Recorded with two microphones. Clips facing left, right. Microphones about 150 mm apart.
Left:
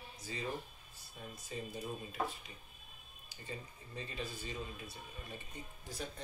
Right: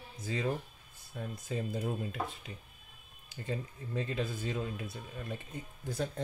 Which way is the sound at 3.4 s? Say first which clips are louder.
Right 9 dB; 85° right.